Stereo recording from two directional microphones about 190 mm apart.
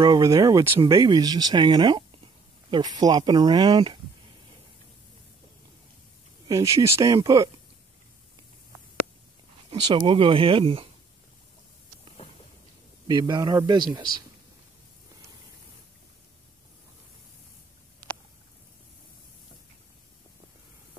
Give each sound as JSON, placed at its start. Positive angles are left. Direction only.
{"t": 0.0, "sound": "speech", "side_deg": -20}
{"t": 6.4, "sound": "speech", "side_deg": -15}
{"t": 9.7, "sound": "speech", "side_deg": -25}
{"t": 13.0, "sound": "speech", "side_deg": -20}